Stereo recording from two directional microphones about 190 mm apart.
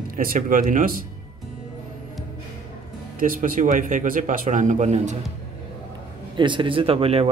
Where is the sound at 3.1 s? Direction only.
45° right (ahead or behind).